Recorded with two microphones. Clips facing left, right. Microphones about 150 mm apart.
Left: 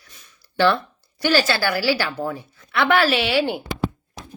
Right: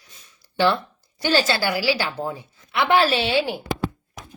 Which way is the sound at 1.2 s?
25° right (ahead or behind).